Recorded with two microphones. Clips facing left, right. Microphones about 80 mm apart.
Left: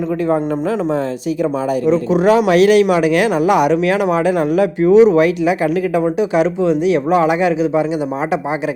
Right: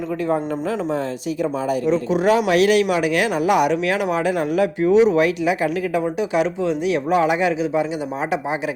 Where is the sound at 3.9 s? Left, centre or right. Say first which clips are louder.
Left 5 dB; left.